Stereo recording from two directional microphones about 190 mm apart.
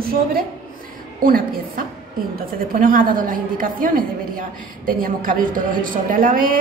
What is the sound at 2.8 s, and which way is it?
A woman's voice, 45° right (ahead or behind).